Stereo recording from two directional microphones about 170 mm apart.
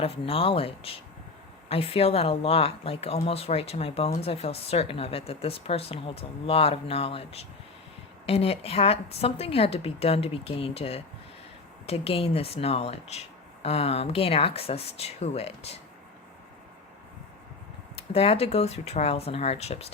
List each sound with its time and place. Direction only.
0.0 s speech: 35° left (ahead or behind)
18.1 s speech: 35° left (ahead or behind)